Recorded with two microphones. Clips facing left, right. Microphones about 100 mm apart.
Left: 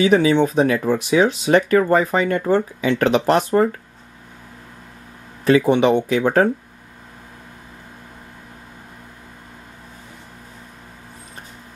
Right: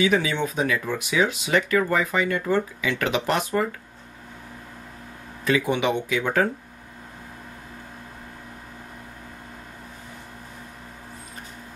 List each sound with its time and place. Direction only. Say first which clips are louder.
0.0 s speech: left 7 dB; 35° left (ahead or behind)
5.4 s speech: left 8 dB; 35° left (ahead or behind)